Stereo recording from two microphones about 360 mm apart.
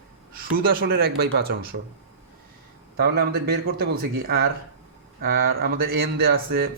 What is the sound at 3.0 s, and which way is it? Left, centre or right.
A man's voice, right.